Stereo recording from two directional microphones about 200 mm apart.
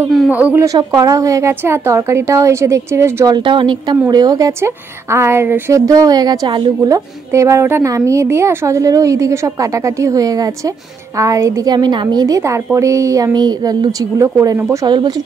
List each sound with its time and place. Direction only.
0.1 s a woman's voice: 5° right (ahead or behind); by 15.1 s 20° right (ahead or behind)